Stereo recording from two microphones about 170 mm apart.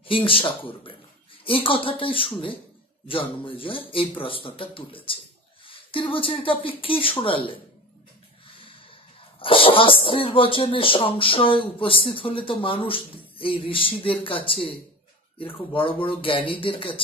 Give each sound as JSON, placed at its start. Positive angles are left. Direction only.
{"t": 0.0, "sound": "speech", "side_deg": 30}
{"t": 8.5, "sound": "snort", "side_deg": 30}
{"t": 9.4, "sound": "speech", "side_deg": 30}